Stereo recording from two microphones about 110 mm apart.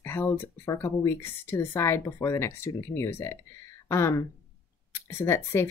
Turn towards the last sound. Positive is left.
turn(degrees=25)  # may be behind; listen again after turning